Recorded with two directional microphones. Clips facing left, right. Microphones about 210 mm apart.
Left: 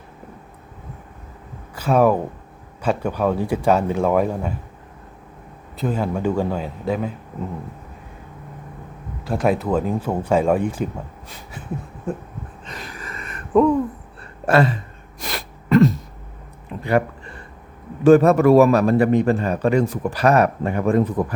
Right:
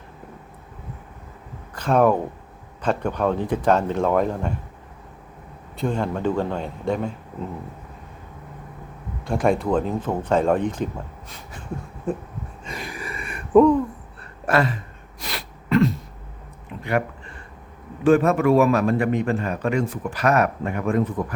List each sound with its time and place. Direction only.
1.7 s speech: 5° left (ahead or behind)
5.7 s a man's voice: 5° left (ahead or behind)
9.2 s speech: 5° left (ahead or behind)
12.1 s a man's voice: centre (ahead or behind)
12.6 s a sound: 10° right (ahead or behind)
14.4 s a sound: 30° left (ahead or behind)
15.2 s sneeze: 45° left (ahead or behind)
18.0 s a man's voice: 40° left (ahead or behind)